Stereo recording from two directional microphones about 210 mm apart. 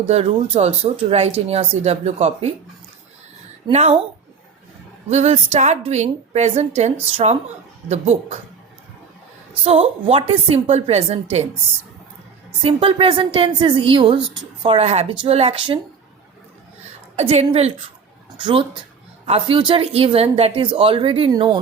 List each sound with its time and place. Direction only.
0.1 s speech: 30° right (ahead or behind)
3.7 s a woman's voice: 30° right (ahead or behind)
5.0 s a woman's voice: 30° right (ahead or behind)
9.6 s speech: 25° right (ahead or behind)
12.6 s speech: 25° right (ahead or behind)
17.2 s speech: 30° right (ahead or behind)